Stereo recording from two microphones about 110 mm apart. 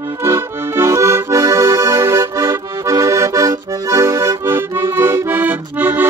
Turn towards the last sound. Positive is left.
turn(degrees=-15)  # may be behind; listen again after turning